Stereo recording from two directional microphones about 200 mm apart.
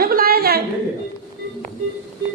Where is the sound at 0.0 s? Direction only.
50° right (ahead or behind).